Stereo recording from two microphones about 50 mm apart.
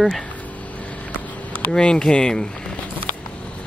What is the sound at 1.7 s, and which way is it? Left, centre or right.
Speech, centre.